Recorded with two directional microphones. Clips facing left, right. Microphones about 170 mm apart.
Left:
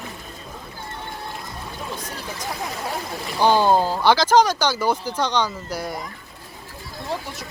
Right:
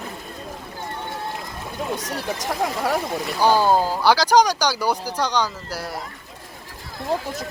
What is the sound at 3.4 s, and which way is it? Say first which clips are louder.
Speech: left 1 dB; 10° right (ahead or behind).